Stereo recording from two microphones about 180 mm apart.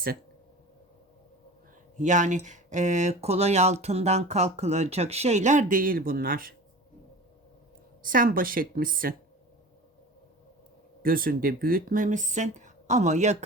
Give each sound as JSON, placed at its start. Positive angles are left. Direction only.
{"t": 2.0, "sound": "speech", "side_deg": -45}
{"t": 8.0, "sound": "speech", "side_deg": -50}
{"t": 11.0, "sound": "speech", "side_deg": -55}